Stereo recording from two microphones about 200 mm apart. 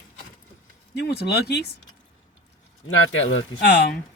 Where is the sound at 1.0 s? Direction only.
55° left (ahead or behind).